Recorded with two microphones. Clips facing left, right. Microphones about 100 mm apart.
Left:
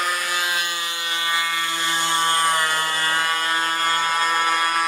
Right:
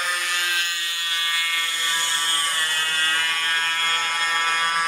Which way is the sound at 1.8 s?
20° left (ahead or behind).